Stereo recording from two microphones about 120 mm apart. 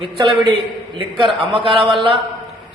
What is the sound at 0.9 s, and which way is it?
A man's voice, 45° right (ahead or behind).